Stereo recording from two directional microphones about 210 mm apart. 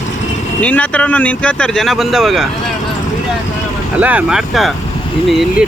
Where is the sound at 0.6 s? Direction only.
5° left (ahead or behind).